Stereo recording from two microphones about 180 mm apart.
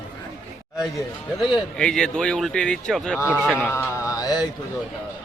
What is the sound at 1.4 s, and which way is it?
Speech, 5° left (ahead or behind).